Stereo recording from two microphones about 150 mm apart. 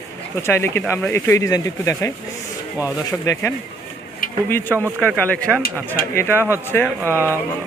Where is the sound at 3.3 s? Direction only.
15° left (ahead or behind).